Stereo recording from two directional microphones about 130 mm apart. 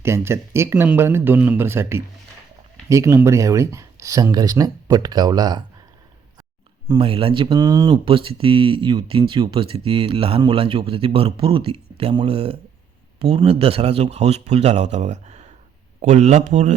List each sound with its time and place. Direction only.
0.0 s speech: 20° right (ahead or behind)
6.8 s a man's voice: 35° right (ahead or behind); by 16.7 s 65° right (ahead or behind)